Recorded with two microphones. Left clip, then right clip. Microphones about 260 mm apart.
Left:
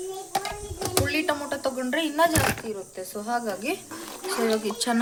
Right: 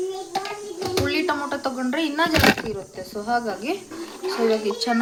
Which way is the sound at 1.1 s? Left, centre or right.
Left.